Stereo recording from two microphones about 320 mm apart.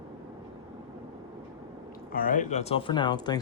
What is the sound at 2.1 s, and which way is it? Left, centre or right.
Speech, left.